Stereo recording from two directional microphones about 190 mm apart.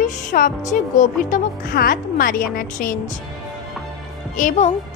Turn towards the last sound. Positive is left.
turn(degrees=40)  # may be behind; listen again after turning